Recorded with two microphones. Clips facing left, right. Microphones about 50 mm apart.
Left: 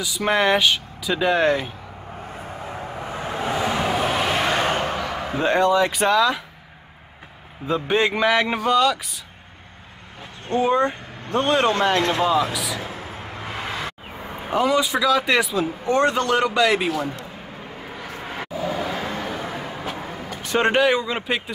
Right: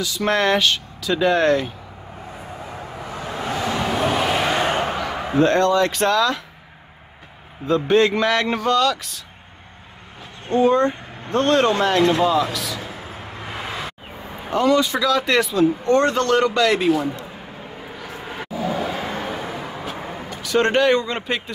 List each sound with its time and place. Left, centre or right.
0.0 s speech: centre
3.1 s a sound: left
3.8 s a sound: centre
5.4 s speech: centre
7.6 s speech: centre
10.5 s speech: centre
14.5 s speech: centre
18.4 s vehicle: centre
19.4 s vehicle: centre
20.0 s vehicle: right
20.5 s speech: centre